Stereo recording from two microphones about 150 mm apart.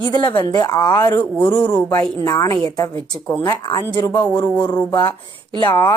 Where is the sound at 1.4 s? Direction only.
10° left (ahead or behind).